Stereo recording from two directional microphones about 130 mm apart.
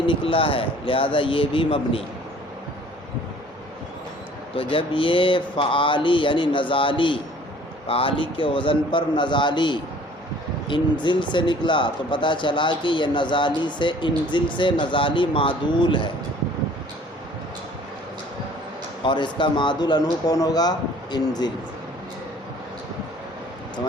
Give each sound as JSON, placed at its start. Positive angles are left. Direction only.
{"t": 0.1, "sound": "speech", "side_deg": 45}
{"t": 4.5, "sound": "speech", "side_deg": 45}
{"t": 19.0, "sound": "speech", "side_deg": 35}